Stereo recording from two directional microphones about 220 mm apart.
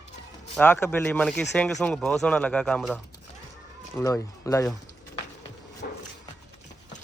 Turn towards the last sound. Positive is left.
turn(degrees=40)  # may be behind; listen again after turning